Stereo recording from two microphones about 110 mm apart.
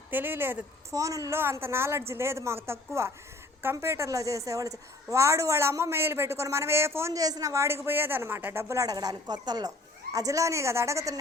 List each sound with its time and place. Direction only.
0.1 s a woman's voice: 20° right (ahead or behind)